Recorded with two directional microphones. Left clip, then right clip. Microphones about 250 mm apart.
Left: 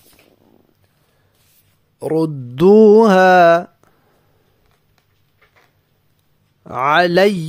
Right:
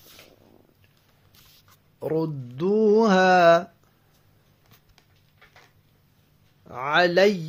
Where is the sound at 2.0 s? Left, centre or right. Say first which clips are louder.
Left 8 dB; left.